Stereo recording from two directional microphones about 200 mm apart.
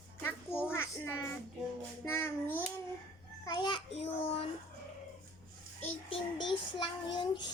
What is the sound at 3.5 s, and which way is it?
Child singing, 20° left (ahead or behind).